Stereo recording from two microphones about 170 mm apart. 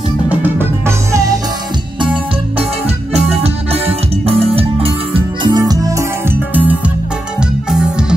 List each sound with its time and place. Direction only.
0.3 s music: 10° right (ahead or behind)
3.4 s music: 40° right (ahead or behind); by 6.0 s 20° right (ahead or behind)
6.5 s music: 10° right (ahead or behind)